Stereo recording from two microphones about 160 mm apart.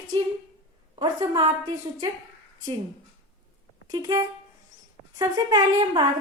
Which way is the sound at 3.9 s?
25° right (ahead or behind).